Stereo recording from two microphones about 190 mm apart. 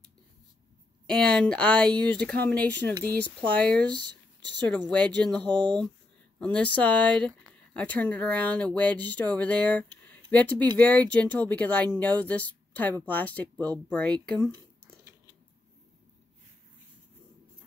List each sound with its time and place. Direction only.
1.0 s speech: 5° left (ahead or behind)